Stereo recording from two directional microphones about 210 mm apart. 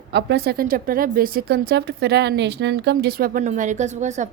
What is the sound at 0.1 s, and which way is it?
Speech, 55° right (ahead or behind).